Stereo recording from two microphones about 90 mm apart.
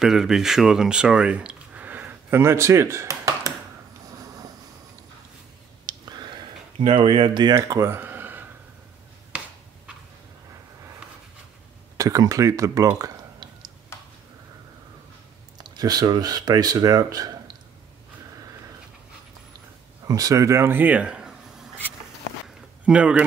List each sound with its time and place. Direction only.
0.0 s speech: 5° right (ahead or behind); by 3.5 s 40° right (ahead or behind)
4.2 s vehicle: 40° right (ahead or behind)
5.9 s a sound: 50° right (ahead or behind)
7.9 s a sound: 20° right (ahead or behind)
12.0 s speech: 40° right (ahead or behind)
15.5 s speech: 50° right (ahead or behind)
20.1 s speech: 40° right (ahead or behind); by 21.4 s 10° right (ahead or behind)
22.8 s speech: 15° right (ahead or behind)